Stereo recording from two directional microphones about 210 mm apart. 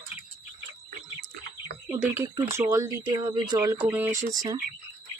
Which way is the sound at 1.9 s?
10° right (ahead or behind).